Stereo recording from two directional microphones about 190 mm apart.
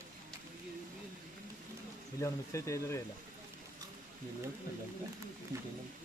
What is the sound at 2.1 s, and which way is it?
Speech, 15° left (ahead or behind).